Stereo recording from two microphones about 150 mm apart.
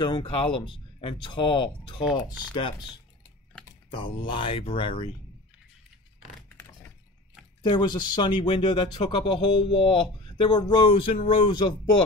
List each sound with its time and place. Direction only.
0.0 s speech: 35° left (ahead or behind)
7.6 s speech: 30° left (ahead or behind)